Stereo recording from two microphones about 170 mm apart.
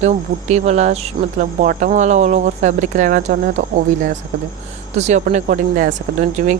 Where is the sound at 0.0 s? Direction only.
40° right (ahead or behind).